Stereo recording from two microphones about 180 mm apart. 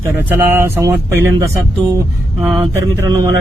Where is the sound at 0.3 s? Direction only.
10° right (ahead or behind).